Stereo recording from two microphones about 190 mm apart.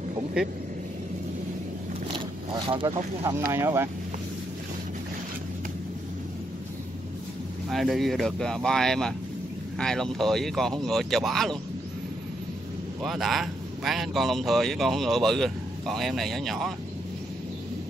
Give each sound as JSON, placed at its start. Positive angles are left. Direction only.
{"t": 2.7, "sound": "speech", "side_deg": -25}
{"t": 3.3, "sound": "speech", "side_deg": -15}
{"t": 7.7, "sound": "speech", "side_deg": 0}
{"t": 13.0, "sound": "speech", "side_deg": 0}